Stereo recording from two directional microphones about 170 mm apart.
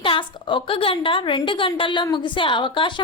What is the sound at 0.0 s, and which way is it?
A woman's voice, 30° left (ahead or behind).